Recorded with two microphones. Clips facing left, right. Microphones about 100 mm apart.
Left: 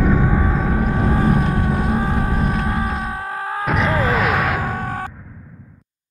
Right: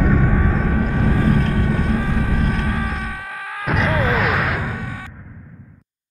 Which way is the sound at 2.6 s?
30° left (ahead or behind).